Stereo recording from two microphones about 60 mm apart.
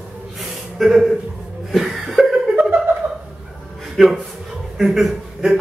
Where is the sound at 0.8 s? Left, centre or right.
Centre.